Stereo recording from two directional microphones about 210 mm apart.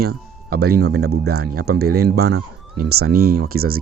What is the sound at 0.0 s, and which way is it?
Speech, 50° right (ahead or behind).